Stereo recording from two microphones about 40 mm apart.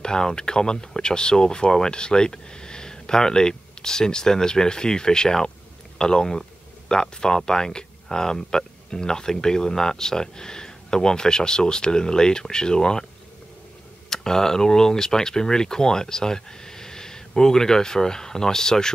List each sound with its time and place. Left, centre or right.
0.0 s speech: centre
14.0 s speech: centre